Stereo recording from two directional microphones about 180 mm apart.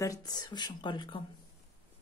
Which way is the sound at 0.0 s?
20° left (ahead or behind).